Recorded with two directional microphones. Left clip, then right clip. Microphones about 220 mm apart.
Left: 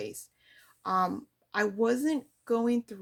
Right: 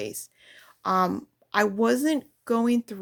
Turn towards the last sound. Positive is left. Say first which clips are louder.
# right 4 dB
turn(degrees=-40)  # may be behind; listen again after turning